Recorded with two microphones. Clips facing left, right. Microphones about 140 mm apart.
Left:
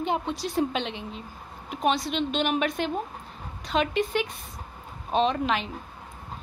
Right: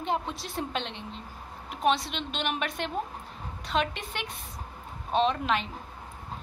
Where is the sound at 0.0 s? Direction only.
Centre (ahead or behind).